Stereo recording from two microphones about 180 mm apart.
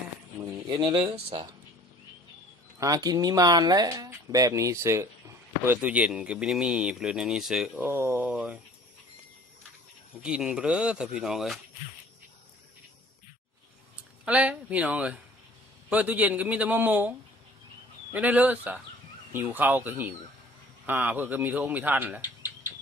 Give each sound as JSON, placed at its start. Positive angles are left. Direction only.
{"t": 0.4, "sound": "speech", "side_deg": -25}
{"t": 2.8, "sound": "speech", "side_deg": -20}
{"t": 10.2, "sound": "speech", "side_deg": -5}
{"t": 14.3, "sound": "speech", "side_deg": -5}